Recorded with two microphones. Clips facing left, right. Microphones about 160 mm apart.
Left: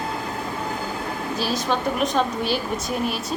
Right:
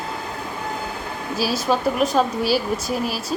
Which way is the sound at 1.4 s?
5° right (ahead or behind).